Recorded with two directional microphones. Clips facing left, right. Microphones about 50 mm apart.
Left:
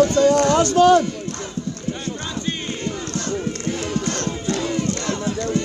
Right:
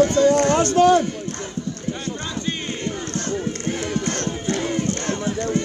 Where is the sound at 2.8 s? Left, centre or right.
Right.